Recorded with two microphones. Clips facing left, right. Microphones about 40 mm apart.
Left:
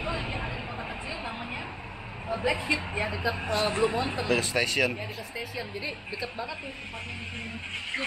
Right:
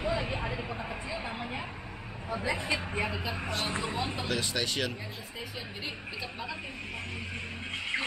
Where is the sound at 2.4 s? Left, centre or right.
Left.